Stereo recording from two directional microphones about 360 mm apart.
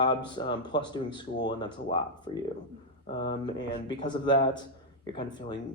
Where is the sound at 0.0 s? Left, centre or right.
Centre.